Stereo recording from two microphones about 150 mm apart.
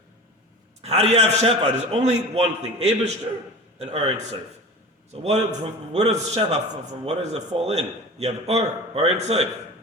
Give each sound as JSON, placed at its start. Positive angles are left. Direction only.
{"t": 0.8, "sound": "a man's voice", "side_deg": -45}